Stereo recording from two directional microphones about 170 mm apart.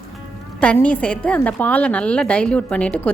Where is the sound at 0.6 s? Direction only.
10° left (ahead or behind).